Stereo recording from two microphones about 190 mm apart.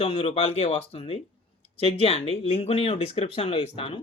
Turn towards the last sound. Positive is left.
turn(degrees=30)  # may be behind; listen again after turning